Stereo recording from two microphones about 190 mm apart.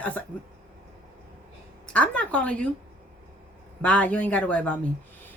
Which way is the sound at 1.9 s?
5° left (ahead or behind).